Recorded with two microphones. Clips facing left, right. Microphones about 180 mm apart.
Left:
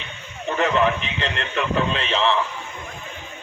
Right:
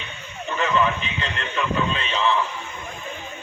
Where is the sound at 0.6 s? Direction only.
70° left (ahead or behind).